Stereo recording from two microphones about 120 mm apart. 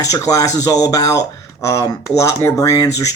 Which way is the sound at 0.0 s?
30° left (ahead or behind).